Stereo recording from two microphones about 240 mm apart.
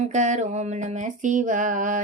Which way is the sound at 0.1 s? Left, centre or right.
Right.